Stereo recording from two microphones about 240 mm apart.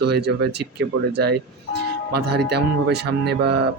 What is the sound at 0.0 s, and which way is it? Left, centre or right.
Speech, right.